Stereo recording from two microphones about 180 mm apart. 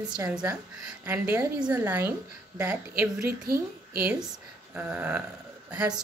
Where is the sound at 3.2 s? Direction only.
55° right (ahead or behind).